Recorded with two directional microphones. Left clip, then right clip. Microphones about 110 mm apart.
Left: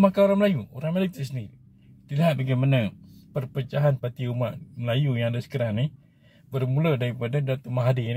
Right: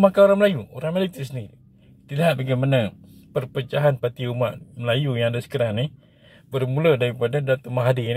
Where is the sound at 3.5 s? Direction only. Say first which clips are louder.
Right 5 dB; 25° left (ahead or behind).